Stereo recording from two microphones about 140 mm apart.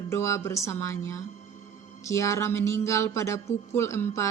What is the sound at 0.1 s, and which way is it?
Music, 20° left (ahead or behind).